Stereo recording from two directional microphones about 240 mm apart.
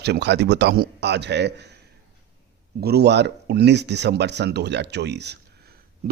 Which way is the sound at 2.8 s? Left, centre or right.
Right.